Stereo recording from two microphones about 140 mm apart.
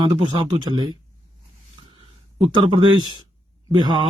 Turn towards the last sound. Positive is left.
turn(degrees=-30)  # may be behind; listen again after turning